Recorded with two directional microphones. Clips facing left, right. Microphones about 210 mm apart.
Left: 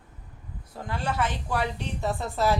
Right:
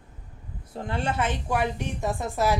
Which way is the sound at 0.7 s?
25° right (ahead or behind).